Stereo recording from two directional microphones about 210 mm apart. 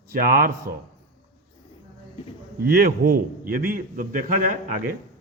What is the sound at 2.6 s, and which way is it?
A man's voice, 45° right (ahead or behind).